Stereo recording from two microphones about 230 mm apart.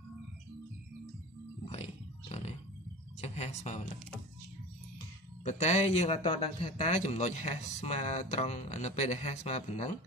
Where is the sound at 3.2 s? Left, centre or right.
Left.